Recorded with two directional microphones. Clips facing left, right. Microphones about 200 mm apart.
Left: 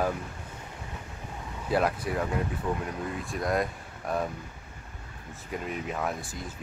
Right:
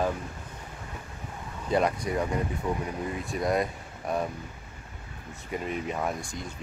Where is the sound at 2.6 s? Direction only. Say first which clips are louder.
Even; 15° right (ahead or behind).